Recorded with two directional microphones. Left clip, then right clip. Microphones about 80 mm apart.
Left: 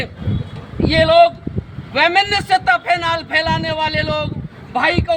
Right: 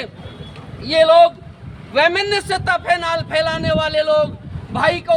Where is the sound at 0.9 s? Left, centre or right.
Right.